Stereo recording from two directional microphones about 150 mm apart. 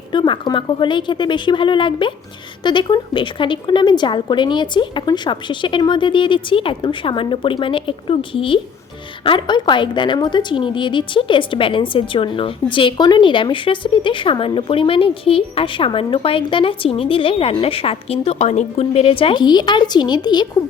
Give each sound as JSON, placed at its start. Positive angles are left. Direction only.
{"t": 0.1, "sound": "a woman's voice", "side_deg": 30}